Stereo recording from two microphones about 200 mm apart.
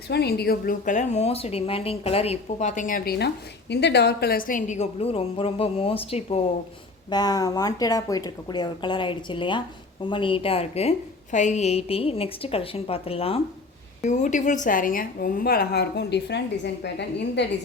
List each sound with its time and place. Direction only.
0.1 s a woman's voice: 55° left (ahead or behind); by 6.4 s 30° left (ahead or behind)
7.1 s a woman's voice: 20° left (ahead or behind); by 17.4 s 60° left (ahead or behind)